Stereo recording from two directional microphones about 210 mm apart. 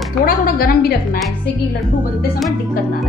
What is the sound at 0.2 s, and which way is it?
Speech, 45° left (ahead or behind).